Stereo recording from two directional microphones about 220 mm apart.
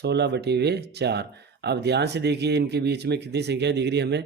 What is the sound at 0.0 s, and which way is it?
Speech, 50° right (ahead or behind).